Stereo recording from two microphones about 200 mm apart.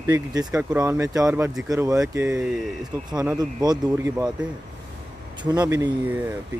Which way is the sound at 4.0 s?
5° right (ahead or behind).